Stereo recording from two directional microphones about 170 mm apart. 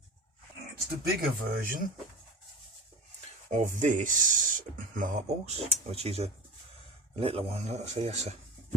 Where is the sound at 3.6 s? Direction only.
45° right (ahead or behind).